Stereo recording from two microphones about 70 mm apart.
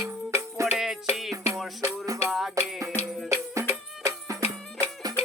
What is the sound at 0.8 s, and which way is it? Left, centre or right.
Music, centre.